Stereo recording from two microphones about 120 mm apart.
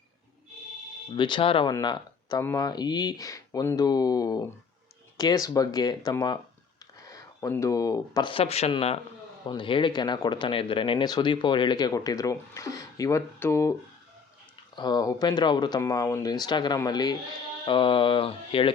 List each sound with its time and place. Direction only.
1.1 s speech: 40° left (ahead or behind)
8.3 s speech: 55° left (ahead or behind)
9.5 s speech: 45° left (ahead or behind); by 13.7 s 25° left (ahead or behind)
14.8 s speech: 35° left (ahead or behind)
15.8 s speech: 25° left (ahead or behind)
17.7 s speech: 45° left (ahead or behind)